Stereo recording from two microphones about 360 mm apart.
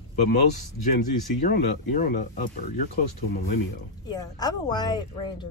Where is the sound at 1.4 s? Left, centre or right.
Left.